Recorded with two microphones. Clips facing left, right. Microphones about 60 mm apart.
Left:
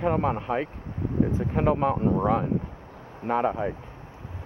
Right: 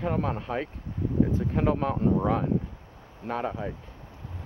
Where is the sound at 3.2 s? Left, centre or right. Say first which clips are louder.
Left 6 dB; left.